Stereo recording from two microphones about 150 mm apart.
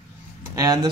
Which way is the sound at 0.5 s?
25° right (ahead or behind).